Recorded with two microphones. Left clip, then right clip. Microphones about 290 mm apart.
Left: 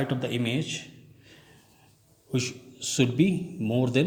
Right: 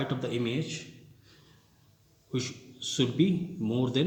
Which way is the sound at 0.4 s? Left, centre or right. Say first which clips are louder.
Left 3 dB; left.